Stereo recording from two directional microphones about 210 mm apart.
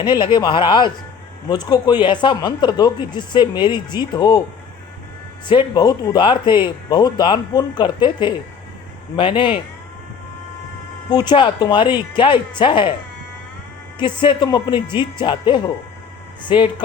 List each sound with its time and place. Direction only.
0.0 s speech: 20° left (ahead or behind)
5.5 s speech: 20° left (ahead or behind)
11.1 s speech: 20° left (ahead or behind)
14.2 s speech: 20° left (ahead or behind)